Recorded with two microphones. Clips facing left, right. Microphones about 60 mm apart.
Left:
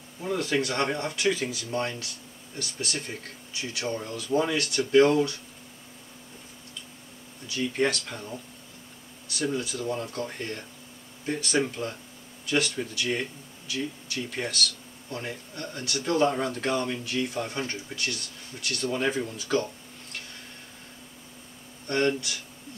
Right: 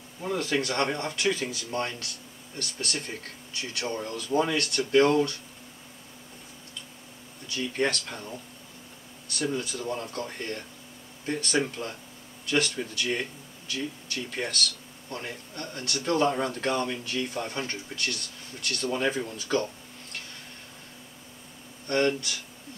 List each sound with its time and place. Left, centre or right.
0.4 s speech: centre
4.6 s speech: centre
7.4 s speech: centre
9.4 s speech: centre
15.5 s speech: centre
18.8 s speech: centre
21.9 s speech: centre